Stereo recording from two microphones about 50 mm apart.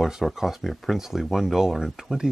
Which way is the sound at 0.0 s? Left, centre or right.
Centre.